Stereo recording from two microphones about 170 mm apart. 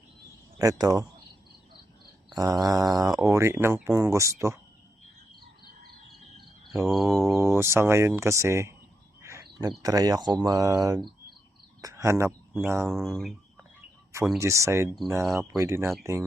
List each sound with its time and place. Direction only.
0.6 s cricket: 20° right (ahead or behind)
2.3 s speech: 20° right (ahead or behind)
6.9 s speech: centre (ahead or behind)
7.2 s speech: 15° right (ahead or behind)
9.2 s a sound: 20° right (ahead or behind)
9.8 s cricket: 20° right (ahead or behind)
11.8 s speech: 20° right (ahead or behind)
12.9 s speech: centre (ahead or behind)
14.3 s speech: 15° right (ahead or behind)